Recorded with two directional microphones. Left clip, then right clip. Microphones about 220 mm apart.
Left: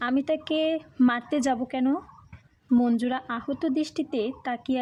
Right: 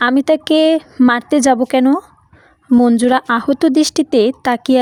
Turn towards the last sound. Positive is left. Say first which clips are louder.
# right 15 dB
turn(degrees=-45)  # may be behind; listen again after turning